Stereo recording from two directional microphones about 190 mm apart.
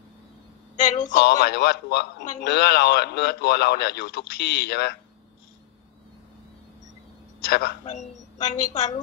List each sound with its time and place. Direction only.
0.7 s a man's voice: 40° left (ahead or behind)
1.2 s a man's voice: 60° left (ahead or behind)
7.4 s a man's voice: 55° left (ahead or behind)
8.4 s a woman's voice: 40° left (ahead or behind)